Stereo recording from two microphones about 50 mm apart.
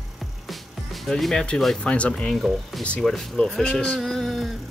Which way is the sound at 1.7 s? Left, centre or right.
Left.